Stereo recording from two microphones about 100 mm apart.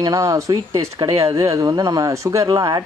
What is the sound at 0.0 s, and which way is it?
A man's voice, 35° right (ahead or behind).